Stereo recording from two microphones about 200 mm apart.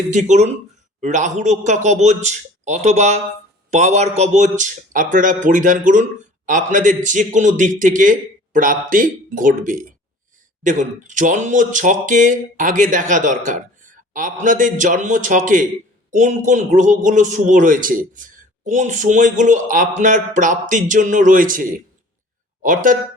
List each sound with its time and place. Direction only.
0.1 s a man's voice: 35° right (ahead or behind)